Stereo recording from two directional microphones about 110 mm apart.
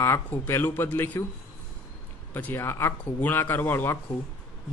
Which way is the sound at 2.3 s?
20° left (ahead or behind).